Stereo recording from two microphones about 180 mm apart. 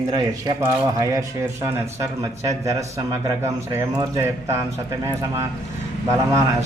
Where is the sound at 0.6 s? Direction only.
15° right (ahead or behind).